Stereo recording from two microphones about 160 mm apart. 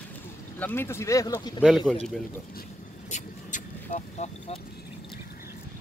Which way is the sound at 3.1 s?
50° left (ahead or behind).